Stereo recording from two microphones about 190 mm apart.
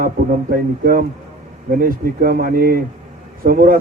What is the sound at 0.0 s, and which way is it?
A man's voice, 50° right (ahead or behind).